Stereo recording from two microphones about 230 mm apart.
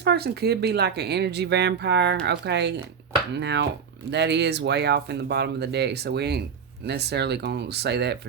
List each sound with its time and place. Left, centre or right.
0.0 s speech: right